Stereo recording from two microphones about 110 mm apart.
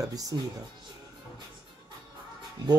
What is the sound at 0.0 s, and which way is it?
Speech, 35° right (ahead or behind).